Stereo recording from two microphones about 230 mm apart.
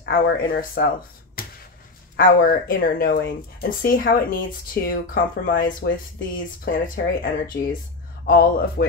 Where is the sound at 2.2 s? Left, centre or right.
Left.